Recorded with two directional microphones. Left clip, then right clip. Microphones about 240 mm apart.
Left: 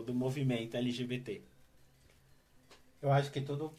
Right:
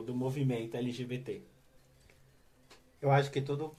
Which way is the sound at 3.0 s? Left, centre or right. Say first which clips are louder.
Right 3 dB; right.